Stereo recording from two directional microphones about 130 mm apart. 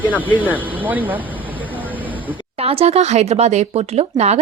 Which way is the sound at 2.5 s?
50° right (ahead or behind).